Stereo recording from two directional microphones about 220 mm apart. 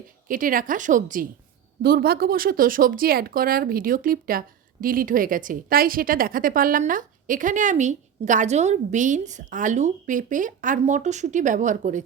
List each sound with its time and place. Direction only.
0.3 s speech: 40° right (ahead or behind)